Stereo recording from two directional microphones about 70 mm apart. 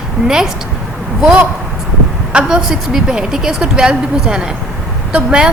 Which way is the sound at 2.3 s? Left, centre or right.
Centre.